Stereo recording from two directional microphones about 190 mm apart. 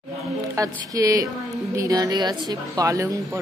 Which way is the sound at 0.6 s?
15° right (ahead or behind).